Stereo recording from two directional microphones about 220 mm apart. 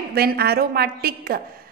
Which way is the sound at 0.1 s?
45° right (ahead or behind).